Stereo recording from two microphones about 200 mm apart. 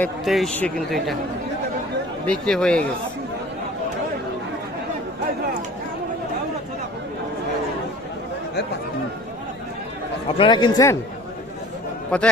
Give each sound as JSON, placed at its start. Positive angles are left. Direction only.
{"t": 0.0, "sound": "speech", "side_deg": 0}
{"t": 2.2, "sound": "speech", "side_deg": 5}
{"t": 10.3, "sound": "speech", "side_deg": 25}
{"t": 12.1, "sound": "speech", "side_deg": 5}